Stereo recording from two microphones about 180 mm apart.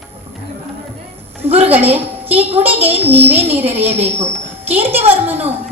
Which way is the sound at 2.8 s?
10° right (ahead or behind).